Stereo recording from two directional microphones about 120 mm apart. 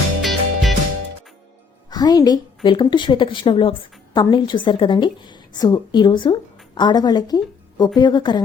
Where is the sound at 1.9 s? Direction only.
35° left (ahead or behind).